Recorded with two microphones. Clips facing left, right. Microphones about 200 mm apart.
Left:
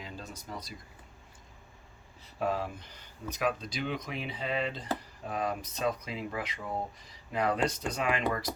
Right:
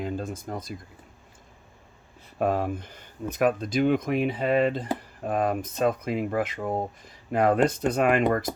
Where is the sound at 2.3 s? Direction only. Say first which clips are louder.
Right 7 dB; 55° right (ahead or behind).